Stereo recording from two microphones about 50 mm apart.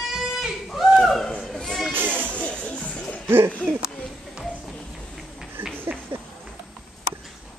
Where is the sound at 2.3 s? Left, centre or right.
Left.